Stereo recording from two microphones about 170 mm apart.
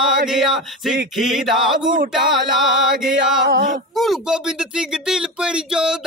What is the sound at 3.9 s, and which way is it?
Speech, centre (ahead or behind).